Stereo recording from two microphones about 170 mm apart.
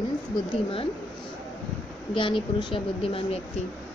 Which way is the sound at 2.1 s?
30° left (ahead or behind).